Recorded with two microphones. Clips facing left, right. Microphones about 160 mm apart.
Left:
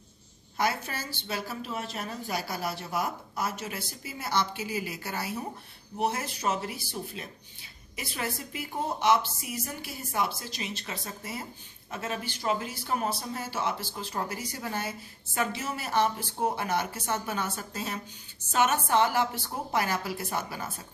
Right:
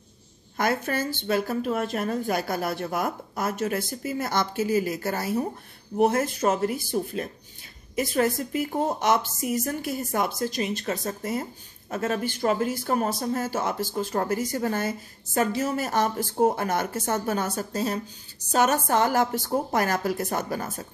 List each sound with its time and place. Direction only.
0.6 s speech: 50° right (ahead or behind)